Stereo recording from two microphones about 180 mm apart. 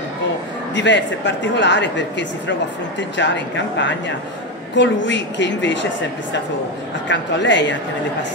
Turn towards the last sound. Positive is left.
turn(degrees=90)